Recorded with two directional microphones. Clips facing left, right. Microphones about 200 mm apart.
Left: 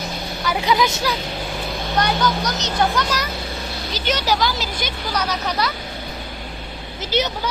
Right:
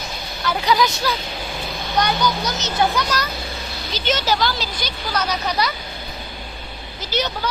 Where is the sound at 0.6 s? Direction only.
25° left (ahead or behind).